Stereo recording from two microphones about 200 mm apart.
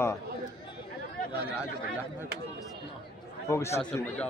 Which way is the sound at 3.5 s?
15° left (ahead or behind).